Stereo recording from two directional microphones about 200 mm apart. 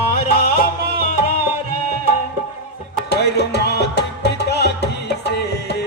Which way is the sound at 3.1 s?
55° left (ahead or behind).